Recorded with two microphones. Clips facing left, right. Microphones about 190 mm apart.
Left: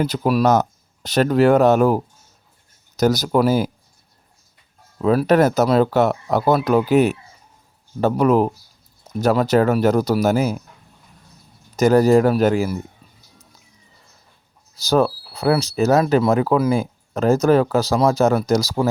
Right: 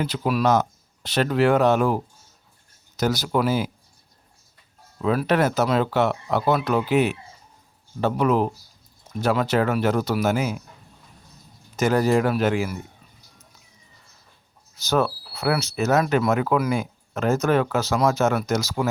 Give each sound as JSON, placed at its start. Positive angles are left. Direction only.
{"t": 0.0, "sound": "speech", "side_deg": 45}
{"t": 4.9, "sound": "speech", "side_deg": 40}
{"t": 11.8, "sound": "speech", "side_deg": 40}
{"t": 14.8, "sound": "speech", "side_deg": 35}